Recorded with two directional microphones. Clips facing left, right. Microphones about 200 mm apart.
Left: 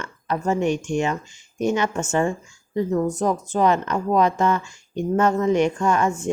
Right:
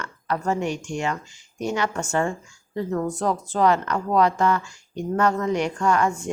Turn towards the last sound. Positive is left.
turn(degrees=20)  # may be behind; listen again after turning